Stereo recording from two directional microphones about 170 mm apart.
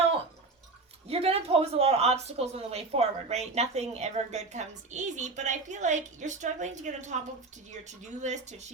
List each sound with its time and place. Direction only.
1.0 s speech: 35° right (ahead or behind)